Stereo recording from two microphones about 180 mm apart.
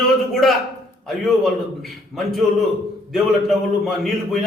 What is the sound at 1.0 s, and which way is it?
A man's voice, centre (ahead or behind).